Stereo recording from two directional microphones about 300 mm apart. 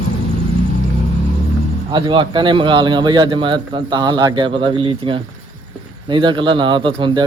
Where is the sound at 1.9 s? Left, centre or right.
Centre.